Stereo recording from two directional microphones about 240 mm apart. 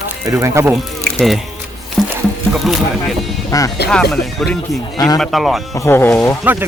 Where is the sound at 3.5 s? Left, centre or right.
Centre.